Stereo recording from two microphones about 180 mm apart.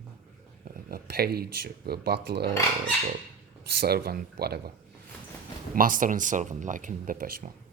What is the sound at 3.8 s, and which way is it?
Speech, 60° right (ahead or behind).